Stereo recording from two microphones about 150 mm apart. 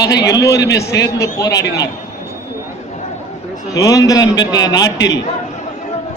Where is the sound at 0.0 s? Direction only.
25° left (ahead or behind).